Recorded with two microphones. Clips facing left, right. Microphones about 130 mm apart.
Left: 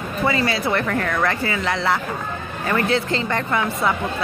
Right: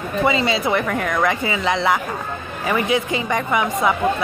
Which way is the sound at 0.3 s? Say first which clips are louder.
Right 1 dB; 20° right (ahead or behind).